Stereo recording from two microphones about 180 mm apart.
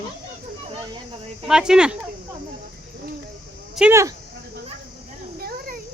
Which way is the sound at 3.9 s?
15° right (ahead or behind).